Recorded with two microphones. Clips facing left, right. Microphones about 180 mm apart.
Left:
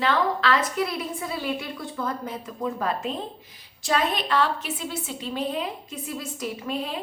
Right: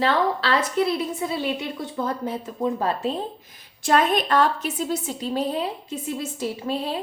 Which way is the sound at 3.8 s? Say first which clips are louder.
Right 5 dB; 50° right (ahead or behind).